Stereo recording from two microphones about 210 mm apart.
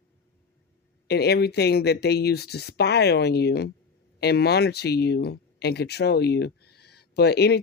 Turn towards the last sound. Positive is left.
turn(degrees=50)  # may be behind; listen again after turning